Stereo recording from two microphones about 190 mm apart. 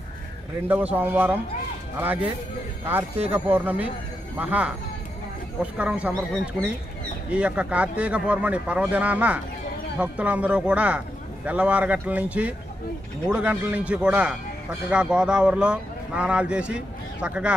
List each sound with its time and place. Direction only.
0.7 s a man's voice: 10° right (ahead or behind)